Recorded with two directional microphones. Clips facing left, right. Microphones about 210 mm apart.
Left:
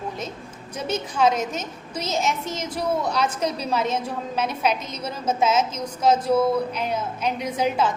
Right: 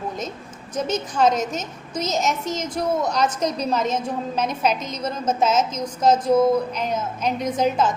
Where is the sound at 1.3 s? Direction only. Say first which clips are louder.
Right 2 dB; 45° right (ahead or behind).